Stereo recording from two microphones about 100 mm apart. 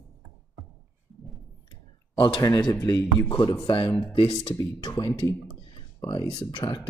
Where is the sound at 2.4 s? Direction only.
40° left (ahead or behind).